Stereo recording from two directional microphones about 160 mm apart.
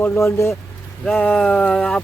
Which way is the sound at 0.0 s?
15° left (ahead or behind).